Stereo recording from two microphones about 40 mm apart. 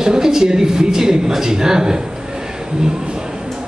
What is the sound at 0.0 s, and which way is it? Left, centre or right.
A man's voice, centre.